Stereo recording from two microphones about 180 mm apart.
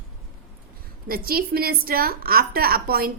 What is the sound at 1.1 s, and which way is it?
A woman's voice, 55° right (ahead or behind).